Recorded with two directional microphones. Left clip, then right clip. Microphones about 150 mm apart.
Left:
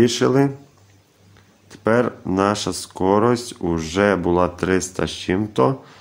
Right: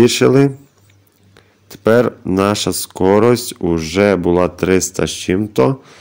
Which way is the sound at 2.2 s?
25° right (ahead or behind).